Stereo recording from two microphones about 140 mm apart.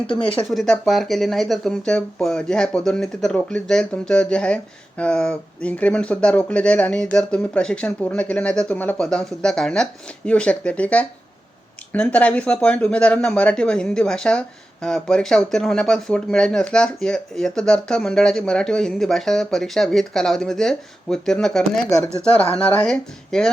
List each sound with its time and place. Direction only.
0.1 s speech: 40° left (ahead or behind)
0.5 s speech: centre (ahead or behind)